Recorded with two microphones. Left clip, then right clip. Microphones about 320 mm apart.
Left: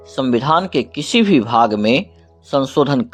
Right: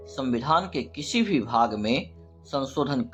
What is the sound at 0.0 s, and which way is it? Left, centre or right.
Speech, left.